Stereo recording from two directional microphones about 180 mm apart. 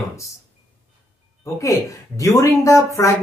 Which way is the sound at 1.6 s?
15° left (ahead or behind).